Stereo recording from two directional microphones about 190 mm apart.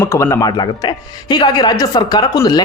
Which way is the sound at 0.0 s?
15° left (ahead or behind).